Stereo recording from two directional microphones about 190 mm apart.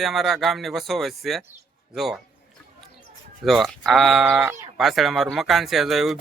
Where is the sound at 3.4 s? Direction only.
Centre (ahead or behind).